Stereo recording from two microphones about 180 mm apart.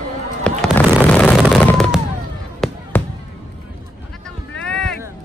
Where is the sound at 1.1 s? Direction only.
5° left (ahead or behind).